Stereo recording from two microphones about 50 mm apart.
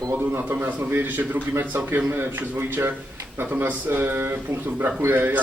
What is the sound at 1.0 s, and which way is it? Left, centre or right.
Speech, right.